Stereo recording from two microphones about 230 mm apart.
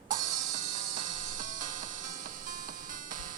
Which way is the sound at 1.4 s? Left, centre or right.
Right.